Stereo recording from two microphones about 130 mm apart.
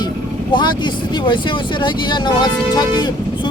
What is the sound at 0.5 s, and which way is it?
Speech, 35° left (ahead or behind).